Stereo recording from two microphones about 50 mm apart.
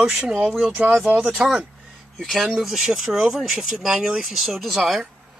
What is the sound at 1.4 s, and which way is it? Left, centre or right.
Speech, right.